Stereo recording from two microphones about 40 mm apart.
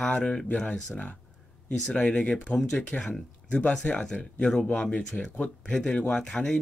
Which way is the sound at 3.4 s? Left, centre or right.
Left.